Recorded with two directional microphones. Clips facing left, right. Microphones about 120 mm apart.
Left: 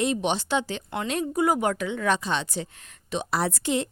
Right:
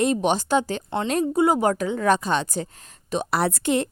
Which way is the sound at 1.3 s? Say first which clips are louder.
Right 3 dB; 25° right (ahead or behind).